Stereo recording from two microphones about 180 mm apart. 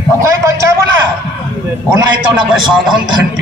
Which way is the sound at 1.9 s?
25° right (ahead or behind).